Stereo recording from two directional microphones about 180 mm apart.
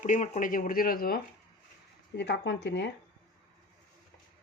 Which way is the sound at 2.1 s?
70° left (ahead or behind).